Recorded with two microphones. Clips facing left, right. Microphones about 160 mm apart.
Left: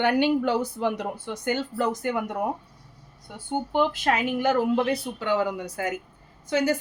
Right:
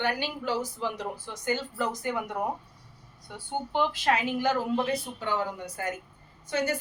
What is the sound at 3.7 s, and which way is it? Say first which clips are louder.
Speech: left 2 dB; 50° left (ahead or behind).